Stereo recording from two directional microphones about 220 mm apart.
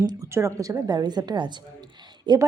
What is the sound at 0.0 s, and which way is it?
Speech, 15° right (ahead or behind).